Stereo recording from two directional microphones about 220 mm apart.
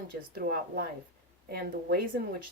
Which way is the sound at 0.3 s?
45° right (ahead or behind).